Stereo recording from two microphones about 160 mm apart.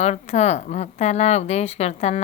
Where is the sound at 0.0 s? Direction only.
45° left (ahead or behind).